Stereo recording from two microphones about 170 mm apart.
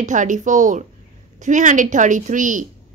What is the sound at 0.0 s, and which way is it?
A woman's voice, 50° right (ahead or behind).